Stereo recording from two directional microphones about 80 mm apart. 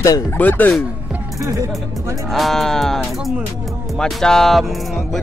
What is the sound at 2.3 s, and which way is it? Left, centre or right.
Speech, centre.